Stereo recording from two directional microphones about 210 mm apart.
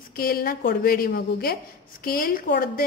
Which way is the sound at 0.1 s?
45° left (ahead or behind).